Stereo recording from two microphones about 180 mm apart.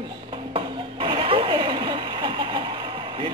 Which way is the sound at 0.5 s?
25° right (ahead or behind).